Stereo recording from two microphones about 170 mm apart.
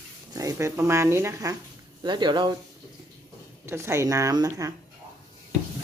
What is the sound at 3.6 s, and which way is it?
A woman's voice, 15° right (ahead or behind).